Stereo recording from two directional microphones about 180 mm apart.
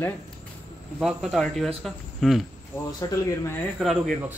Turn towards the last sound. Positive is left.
turn(degrees=0)  # may be behind; listen again after turning